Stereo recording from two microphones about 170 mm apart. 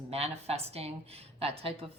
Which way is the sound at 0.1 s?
35° right (ahead or behind).